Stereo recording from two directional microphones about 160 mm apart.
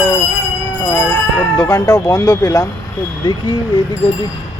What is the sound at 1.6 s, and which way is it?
Speech, 25° left (ahead or behind).